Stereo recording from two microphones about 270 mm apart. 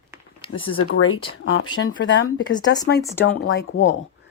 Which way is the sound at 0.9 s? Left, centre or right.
Left.